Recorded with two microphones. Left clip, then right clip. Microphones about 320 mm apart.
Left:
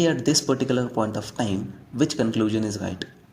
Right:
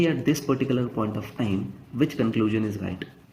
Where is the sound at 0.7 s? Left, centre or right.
Left.